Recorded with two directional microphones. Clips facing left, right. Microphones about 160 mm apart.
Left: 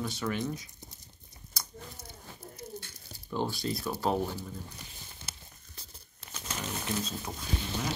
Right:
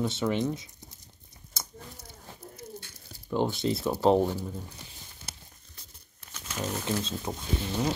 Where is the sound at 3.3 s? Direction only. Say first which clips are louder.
Right 5 dB; 20° right (ahead or behind).